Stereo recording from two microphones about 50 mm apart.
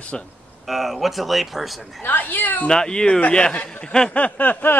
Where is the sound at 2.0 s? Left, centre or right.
Left.